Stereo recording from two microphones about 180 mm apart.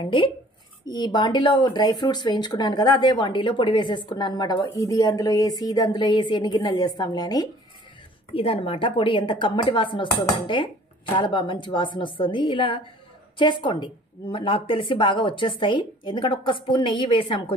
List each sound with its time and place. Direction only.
0.0 s speech: 25° left (ahead or behind)